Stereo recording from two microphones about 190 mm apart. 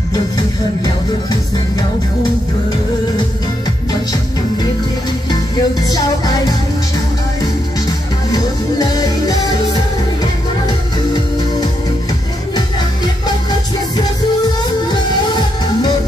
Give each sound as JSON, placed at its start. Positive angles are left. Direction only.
{"t": 5.3, "sound": "music", "side_deg": 20}
{"t": 8.3, "sound": "music", "side_deg": 20}